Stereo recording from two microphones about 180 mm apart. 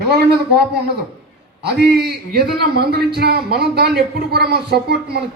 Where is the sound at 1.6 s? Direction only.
65° right (ahead or behind).